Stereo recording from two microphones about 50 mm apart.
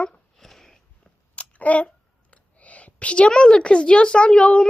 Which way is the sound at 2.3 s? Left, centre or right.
Left.